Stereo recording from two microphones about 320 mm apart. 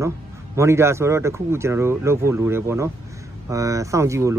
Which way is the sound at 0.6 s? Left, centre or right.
Centre.